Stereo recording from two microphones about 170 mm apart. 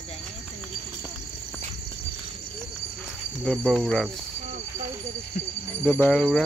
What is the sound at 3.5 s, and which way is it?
Cricket, centre (ahead or behind).